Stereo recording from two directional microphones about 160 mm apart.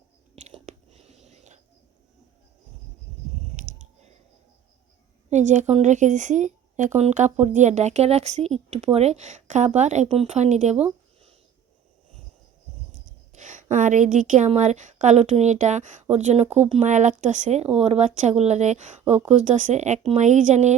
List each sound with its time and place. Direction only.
0.4 s whispering: 45° right (ahead or behind)
3.5 s chewing: 55° right (ahead or behind)
5.3 s a woman's voice: 50° right (ahead or behind)
13.3 s a woman's voice: 50° right (ahead or behind)